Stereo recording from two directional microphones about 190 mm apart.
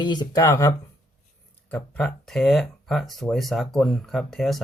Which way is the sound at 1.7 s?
5° left (ahead or behind).